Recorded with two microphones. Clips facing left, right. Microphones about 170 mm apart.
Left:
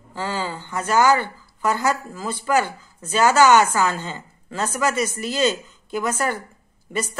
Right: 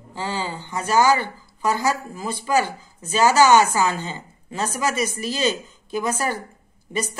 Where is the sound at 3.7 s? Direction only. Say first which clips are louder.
Even; 15° right (ahead or behind).